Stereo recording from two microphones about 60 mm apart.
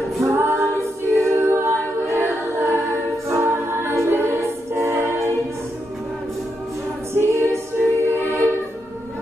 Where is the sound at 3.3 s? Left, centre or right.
Right.